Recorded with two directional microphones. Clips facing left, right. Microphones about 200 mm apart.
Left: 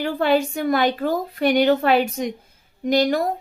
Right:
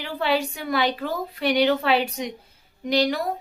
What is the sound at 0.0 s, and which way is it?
A woman's voice, 50° left (ahead or behind).